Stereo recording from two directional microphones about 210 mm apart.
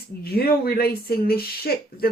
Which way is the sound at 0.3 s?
45° left (ahead or behind).